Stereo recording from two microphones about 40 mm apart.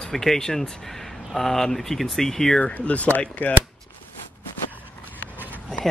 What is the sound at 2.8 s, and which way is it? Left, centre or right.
Speech, left.